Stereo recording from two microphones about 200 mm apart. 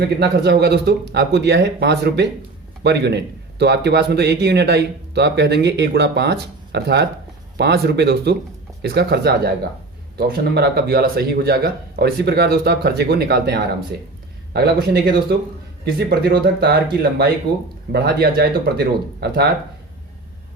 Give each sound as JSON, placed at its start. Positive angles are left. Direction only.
{"t": 0.2, "sound": "a man's voice", "side_deg": -55}